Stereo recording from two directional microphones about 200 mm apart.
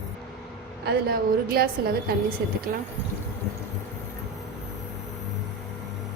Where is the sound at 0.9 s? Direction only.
50° right (ahead or behind).